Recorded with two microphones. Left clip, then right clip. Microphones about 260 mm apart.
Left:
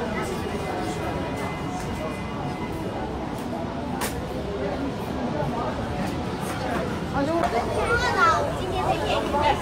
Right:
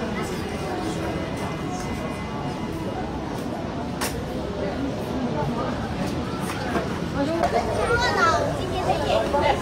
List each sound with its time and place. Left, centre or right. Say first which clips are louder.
8.0 s children playing: left 1 dB; left